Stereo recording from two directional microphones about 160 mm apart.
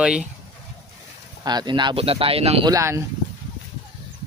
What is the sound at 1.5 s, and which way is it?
Speech, 25° right (ahead or behind).